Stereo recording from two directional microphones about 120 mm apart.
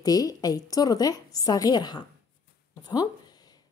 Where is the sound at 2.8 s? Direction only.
35° left (ahead or behind).